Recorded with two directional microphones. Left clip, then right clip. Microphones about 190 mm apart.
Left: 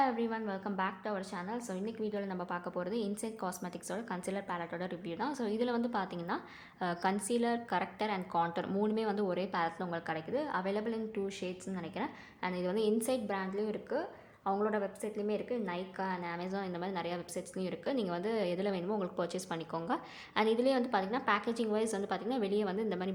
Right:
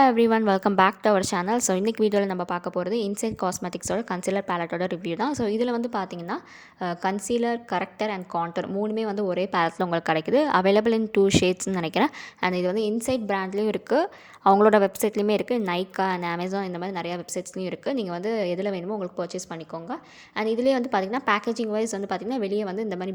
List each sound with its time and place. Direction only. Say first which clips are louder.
0.0 s a woman's voice: right 14 dB; 50° right (ahead or behind); by 23.1 s 30° right (ahead or behind)